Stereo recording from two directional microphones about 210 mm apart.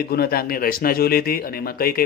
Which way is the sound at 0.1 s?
45° left (ahead or behind).